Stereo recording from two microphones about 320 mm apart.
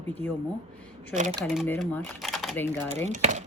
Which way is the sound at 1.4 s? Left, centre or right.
Centre.